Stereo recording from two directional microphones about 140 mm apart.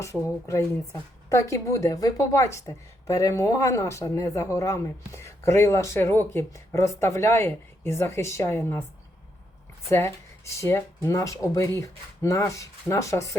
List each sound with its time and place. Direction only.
0.0 s a woman's voice: 20° left (ahead or behind)
9.9 s a woman's voice: 20° left (ahead or behind)